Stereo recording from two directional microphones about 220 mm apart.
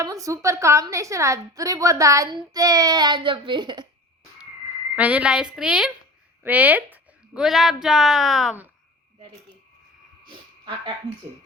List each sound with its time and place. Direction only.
0.0 s a woman's voice: 15° right (ahead or behind)
4.9 s a woman's voice: 5° right (ahead or behind)
10.2 s a sound: 20° right (ahead or behind)